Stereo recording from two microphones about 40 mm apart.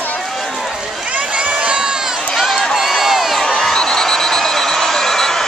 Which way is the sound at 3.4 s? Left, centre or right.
Centre.